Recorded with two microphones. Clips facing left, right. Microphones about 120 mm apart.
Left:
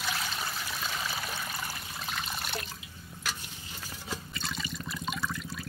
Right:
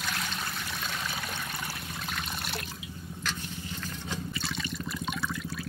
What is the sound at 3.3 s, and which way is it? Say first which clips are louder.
Water: right 6 dB; 10° left (ahead or behind).